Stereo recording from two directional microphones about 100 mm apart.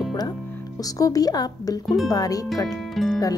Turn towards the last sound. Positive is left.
turn(degrees=0)  # may be behind; listen again after turning